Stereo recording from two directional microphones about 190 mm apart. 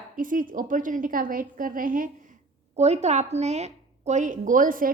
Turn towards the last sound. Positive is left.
turn(degrees=-45)  # may be behind; listen again after turning